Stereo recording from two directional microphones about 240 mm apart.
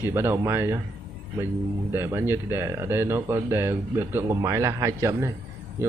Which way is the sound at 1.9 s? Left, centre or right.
Centre.